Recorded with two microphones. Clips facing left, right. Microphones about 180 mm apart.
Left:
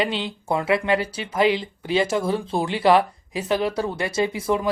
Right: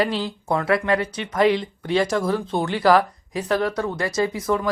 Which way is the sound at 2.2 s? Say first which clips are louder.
Right 1 dB; 30° left (ahead or behind).